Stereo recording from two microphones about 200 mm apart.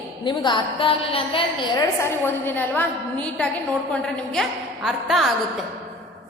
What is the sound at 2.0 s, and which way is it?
A woman's voice, 10° left (ahead or behind).